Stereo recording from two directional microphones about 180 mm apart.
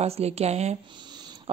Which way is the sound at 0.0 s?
35° right (ahead or behind).